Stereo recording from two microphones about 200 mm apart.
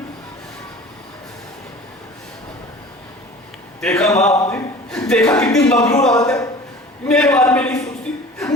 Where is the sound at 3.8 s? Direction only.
5° left (ahead or behind).